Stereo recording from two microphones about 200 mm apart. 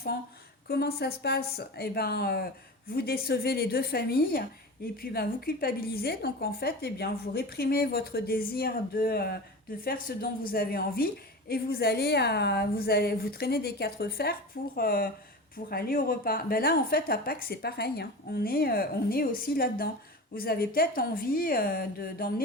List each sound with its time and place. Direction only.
0.7 s a woman's voice: 50° left (ahead or behind)